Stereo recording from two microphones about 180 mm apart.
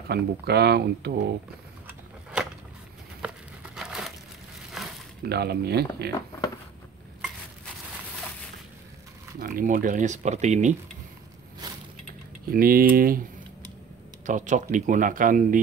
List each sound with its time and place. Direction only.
0.1 s speech: 65° right (ahead or behind)
3.7 s crumpling: 5° right (ahead or behind)
4.8 s a sound: centre (ahead or behind)
5.2 s speech: 65° right (ahead or behind)
9.4 s speech: 50° right (ahead or behind)
11.6 s a sound: 20° right (ahead or behind)
12.4 s speech: 55° right (ahead or behind)
14.2 s speech: 45° right (ahead or behind)